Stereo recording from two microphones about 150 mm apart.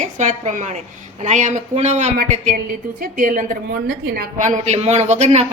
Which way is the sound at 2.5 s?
65° right (ahead or behind).